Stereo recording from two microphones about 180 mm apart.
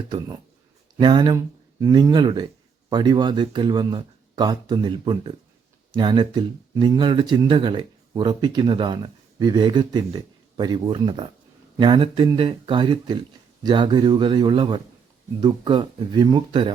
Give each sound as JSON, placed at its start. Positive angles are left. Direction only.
{"t": 0.9, "sound": "speech", "side_deg": -25}